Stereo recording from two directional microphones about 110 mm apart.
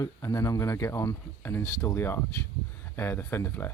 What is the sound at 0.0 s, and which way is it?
Speech, 30° left (ahead or behind).